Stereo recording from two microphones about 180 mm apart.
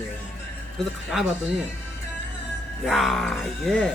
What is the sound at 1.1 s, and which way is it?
Speech, 5° right (ahead or behind).